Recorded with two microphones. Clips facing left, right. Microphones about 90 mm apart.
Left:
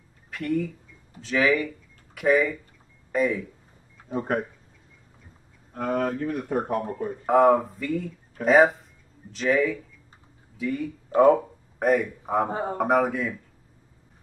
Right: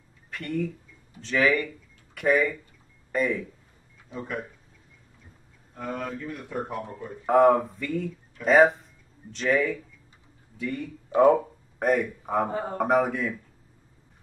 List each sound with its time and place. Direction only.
0.3 s speech: centre (ahead or behind)
4.1 s speech: 50° left (ahead or behind)
5.7 s speech: 55° left (ahead or behind)
7.2 s speech: centre (ahead or behind)
12.4 s speech: 30° left (ahead or behind)
12.7 s speech: centre (ahead or behind)